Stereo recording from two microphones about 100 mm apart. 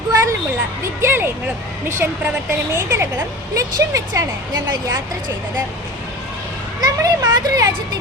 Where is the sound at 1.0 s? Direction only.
20° right (ahead or behind).